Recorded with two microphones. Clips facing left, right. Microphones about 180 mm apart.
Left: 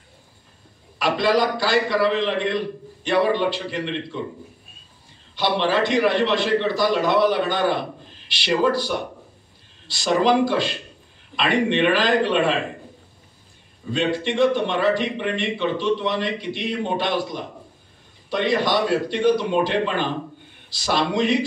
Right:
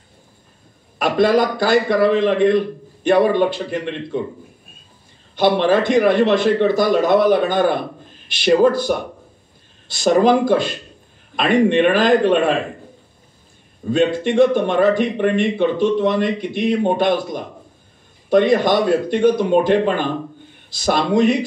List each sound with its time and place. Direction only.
0.9 s a man's voice: 50° right (ahead or behind)
5.3 s a man's voice: 50° right (ahead or behind)
13.9 s a man's voice: 50° right (ahead or behind)